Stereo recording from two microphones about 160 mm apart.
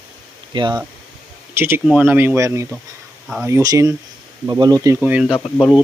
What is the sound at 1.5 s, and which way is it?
Speech, 15° right (ahead or behind).